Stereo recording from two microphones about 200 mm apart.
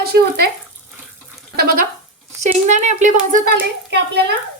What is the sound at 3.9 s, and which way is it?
Speech, 55° right (ahead or behind).